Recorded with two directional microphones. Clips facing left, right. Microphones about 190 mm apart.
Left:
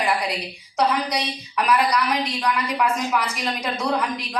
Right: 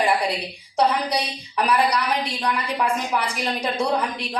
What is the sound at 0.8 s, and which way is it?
A woman's voice, 30° right (ahead or behind).